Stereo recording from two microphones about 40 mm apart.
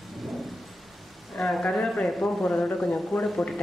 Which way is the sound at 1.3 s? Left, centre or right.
Centre.